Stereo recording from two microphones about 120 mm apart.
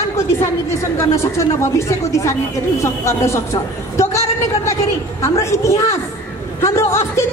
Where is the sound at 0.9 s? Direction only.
25° left (ahead or behind).